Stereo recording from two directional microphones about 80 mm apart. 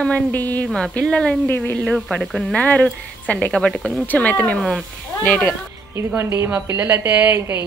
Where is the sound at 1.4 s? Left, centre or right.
Left.